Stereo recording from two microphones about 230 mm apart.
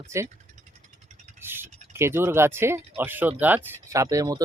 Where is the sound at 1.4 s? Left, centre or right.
Centre.